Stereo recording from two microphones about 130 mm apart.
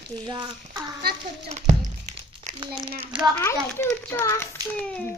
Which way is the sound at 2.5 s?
65° right (ahead or behind).